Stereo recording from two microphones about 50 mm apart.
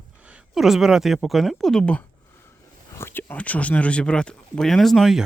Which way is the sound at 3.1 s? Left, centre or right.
Left.